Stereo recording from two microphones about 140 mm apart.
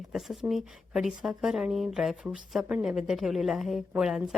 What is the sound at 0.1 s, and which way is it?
A woman's voice, 5° right (ahead or behind).